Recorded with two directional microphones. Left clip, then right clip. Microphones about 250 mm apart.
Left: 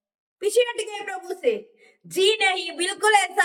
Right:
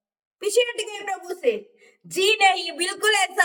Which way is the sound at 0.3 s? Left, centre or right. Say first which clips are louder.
Even; centre.